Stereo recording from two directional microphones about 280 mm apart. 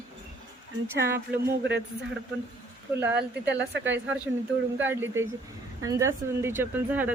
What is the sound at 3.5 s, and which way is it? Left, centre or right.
Speech, right.